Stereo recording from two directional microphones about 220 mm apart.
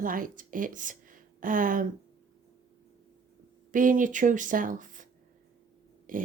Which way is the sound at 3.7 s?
35° right (ahead or behind).